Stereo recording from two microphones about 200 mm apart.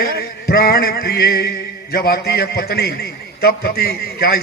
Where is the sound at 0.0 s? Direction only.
50° left (ahead or behind).